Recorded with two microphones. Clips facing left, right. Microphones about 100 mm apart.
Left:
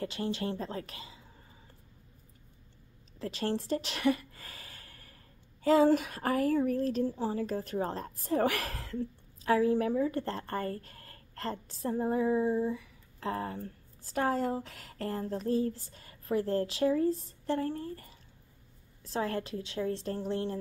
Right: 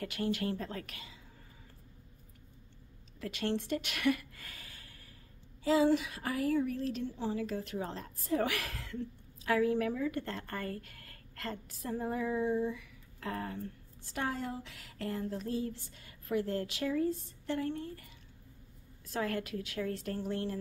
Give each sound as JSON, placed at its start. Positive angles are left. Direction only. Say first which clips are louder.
{"t": 0.0, "sound": "a woman's voice", "louder": "left 1 dB", "side_deg": 25}
{"t": 3.2, "sound": "a sound", "louder": "left 2 dB", "side_deg": 35}
{"t": 5.6, "sound": "a woman's voice", "louder": "left 4 dB", "side_deg": 50}